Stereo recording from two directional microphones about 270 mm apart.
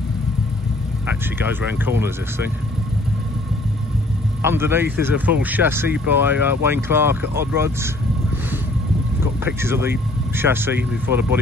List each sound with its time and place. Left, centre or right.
1.0 s speech: centre
4.4 s speech: centre
9.2 s speech: centre